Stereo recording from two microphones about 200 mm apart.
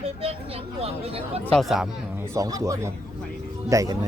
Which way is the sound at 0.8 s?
30° right (ahead or behind).